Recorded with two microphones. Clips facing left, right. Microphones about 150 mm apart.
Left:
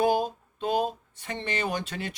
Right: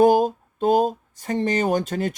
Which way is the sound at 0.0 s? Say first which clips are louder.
Right 8 dB; 45° right (ahead or behind).